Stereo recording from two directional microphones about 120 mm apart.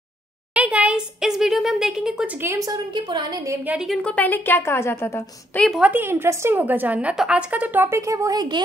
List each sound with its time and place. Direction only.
0.6 s speech: 10° right (ahead or behind)
2.4 s a woman's voice: 20° right (ahead or behind)
2.7 s a woman's voice: 40° right (ahead or behind)
3.6 s a woman's voice: 5° right (ahead or behind)
4.0 s a woman's voice: 10° left (ahead or behind)
5.8 s a woman's voice: 15° right (ahead or behind); by 8.6 s 35° right (ahead or behind)